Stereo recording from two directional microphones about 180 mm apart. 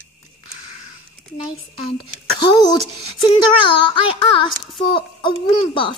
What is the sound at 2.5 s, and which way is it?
A woman's voice, 25° left (ahead or behind).